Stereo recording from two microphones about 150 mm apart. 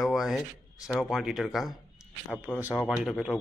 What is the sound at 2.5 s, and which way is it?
Speech, 10° left (ahead or behind).